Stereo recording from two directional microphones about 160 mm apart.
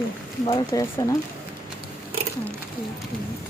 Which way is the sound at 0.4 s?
25° left (ahead or behind).